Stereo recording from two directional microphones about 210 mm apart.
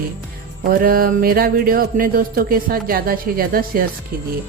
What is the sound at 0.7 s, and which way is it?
Speech, 45° right (ahead or behind).